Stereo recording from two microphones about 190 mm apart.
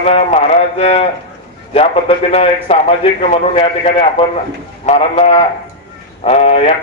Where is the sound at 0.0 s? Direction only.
35° left (ahead or behind).